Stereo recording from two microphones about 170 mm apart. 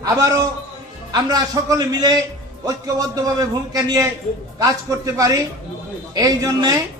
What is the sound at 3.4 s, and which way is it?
A man's voice, 20° right (ahead or behind).